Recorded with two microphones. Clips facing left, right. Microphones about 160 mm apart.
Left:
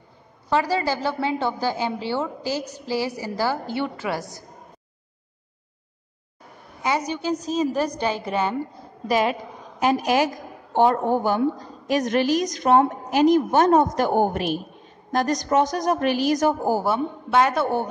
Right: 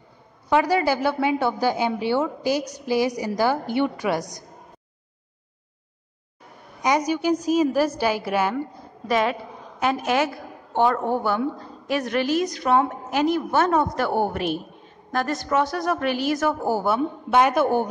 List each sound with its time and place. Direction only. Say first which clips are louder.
0.5 s a woman's voice: right 2 dB; 15° right (ahead or behind)
7.1 s a woman's voice: right 4 dB; 10° right (ahead or behind)
9.0 s a woman's voice: left 1 dB; 30° left (ahead or behind)
9.8 s speech: left 2 dB; 15° left (ahead or behind)
10.2 s a sound: left 1 dB; 40° left (ahead or behind)
10.9 s speech: left 2 dB; 15° left (ahead or behind)
11.3 s a woman's voice: left 3 dB; 40° left (ahead or behind)
12.1 s speech: left 1 dB; 20° left (ahead or behind)
12.7 s a woman's voice: left 3 dB; 40° left (ahead or behind)
13.0 s a woman's voice: left 5 dB; 15° left (ahead or behind)
17.3 s a woman's voice: right 1 dB; 15° right (ahead or behind)